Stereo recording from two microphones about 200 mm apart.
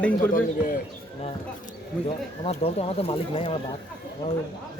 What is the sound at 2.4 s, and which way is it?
Speech, 30° left (ahead or behind).